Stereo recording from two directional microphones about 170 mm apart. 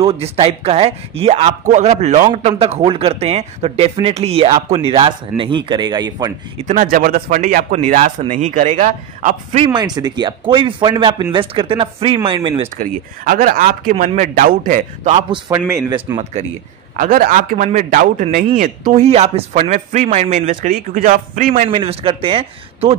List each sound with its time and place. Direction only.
0.0 s a man's voice: 35° right (ahead or behind)
5.3 s speech: 5° right (ahead or behind)
5.7 s a man's voice: 25° right (ahead or behind)
6.6 s a man's voice: 50° right (ahead or behind)
9.7 s a man's voice: 25° right (ahead or behind)
12.7 s a man's voice: 55° right (ahead or behind)
15.3 s a man's voice: 30° right (ahead or behind)
16.9 s a man's voice: 55° right (ahead or behind)
19.0 s a man's voice: 35° right (ahead or behind); by 21.6 s 55° right (ahead or behind)
21.6 s a man's voice: 30° right (ahead or behind)